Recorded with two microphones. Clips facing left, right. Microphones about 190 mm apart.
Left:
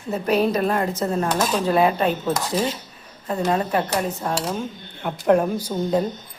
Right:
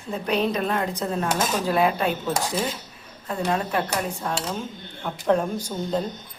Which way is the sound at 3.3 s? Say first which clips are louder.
Left 4 dB; 5° left (ahead or behind).